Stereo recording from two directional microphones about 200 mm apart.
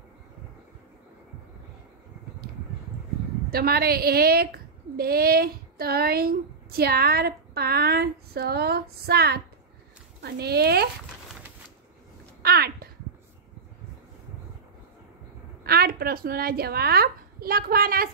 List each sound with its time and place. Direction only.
3.5 s speech: 50° right (ahead or behind)
12.4 s a sound: 50° right (ahead or behind)
15.6 s a woman's voice: 50° right (ahead or behind)